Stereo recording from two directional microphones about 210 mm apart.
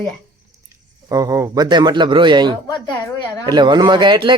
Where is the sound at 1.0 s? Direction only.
15° right (ahead or behind).